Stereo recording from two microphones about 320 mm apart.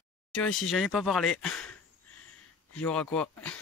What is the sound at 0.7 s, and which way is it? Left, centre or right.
Speech, centre.